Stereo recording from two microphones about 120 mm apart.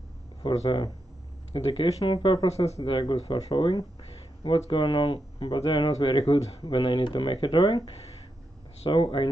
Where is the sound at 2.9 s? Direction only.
40° left (ahead or behind).